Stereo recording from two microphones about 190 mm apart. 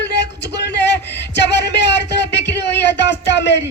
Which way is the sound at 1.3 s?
65° left (ahead or behind).